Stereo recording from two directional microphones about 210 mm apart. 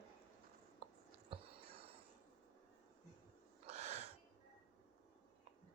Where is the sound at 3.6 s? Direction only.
35° right (ahead or behind).